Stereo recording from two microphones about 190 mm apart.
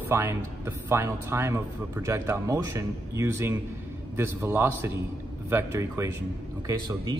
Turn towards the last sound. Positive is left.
turn(degrees=-20)  # may be behind; listen again after turning